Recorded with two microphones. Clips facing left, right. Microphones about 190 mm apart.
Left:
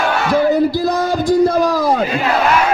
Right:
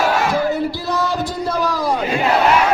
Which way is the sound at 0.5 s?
40° left (ahead or behind).